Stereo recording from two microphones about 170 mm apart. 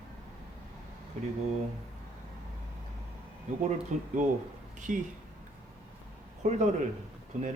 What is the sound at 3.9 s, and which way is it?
A man's voice, 45° right (ahead or behind).